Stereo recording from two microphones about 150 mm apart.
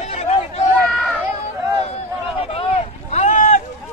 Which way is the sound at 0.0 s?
45° left (ahead or behind).